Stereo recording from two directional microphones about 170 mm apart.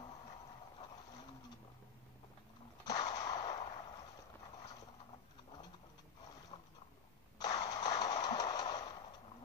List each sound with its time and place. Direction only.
2.8 s whip: 25° left (ahead or behind)
6.5 s a sound: 30° left (ahead or behind)
8.0 s train: 20° left (ahead or behind)